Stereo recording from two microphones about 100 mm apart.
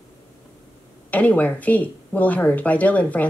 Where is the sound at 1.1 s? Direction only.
15° left (ahead or behind).